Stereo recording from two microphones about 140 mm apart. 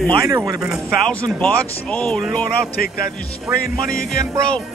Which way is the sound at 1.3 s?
10° left (ahead or behind).